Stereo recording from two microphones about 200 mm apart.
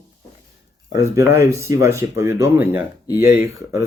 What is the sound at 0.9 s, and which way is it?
Speech, 15° right (ahead or behind).